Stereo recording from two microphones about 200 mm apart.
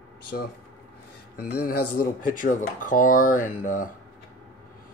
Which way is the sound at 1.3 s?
50° left (ahead or behind).